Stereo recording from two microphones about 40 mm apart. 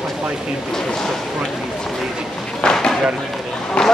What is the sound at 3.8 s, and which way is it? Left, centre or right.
Speech, left.